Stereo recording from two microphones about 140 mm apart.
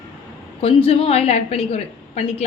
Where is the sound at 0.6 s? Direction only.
45° left (ahead or behind).